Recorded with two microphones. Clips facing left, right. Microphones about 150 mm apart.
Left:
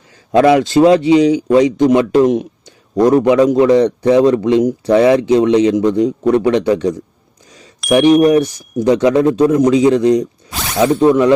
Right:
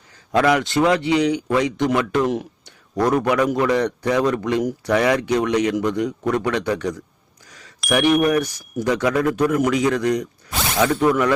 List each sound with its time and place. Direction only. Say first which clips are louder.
0.3 s a man's voice: left 8 dB; 25° left (ahead or behind)